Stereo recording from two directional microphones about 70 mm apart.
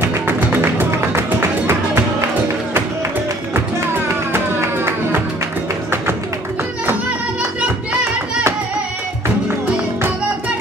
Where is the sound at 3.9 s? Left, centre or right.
Right.